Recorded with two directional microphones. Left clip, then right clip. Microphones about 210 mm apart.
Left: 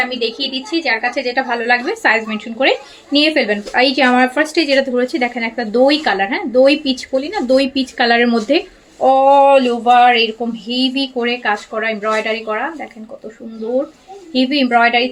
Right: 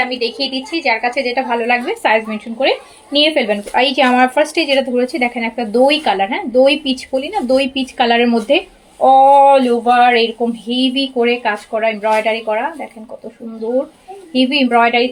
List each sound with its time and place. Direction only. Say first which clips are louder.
0.2 s speech: right 1 dB; 15° left (ahead or behind)
14.3 s speech: right 1 dB; 20° left (ahead or behind)